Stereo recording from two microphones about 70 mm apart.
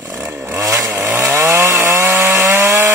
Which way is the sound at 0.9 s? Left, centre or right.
Right.